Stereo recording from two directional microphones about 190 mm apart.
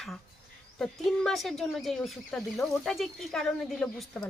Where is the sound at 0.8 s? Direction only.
5° left (ahead or behind).